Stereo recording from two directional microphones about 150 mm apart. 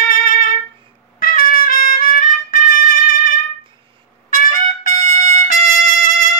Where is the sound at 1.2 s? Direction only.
70° left (ahead or behind).